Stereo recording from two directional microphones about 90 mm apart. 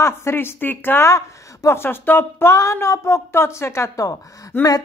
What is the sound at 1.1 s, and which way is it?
Speech, 35° left (ahead or behind).